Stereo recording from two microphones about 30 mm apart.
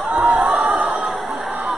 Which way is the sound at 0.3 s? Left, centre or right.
Right.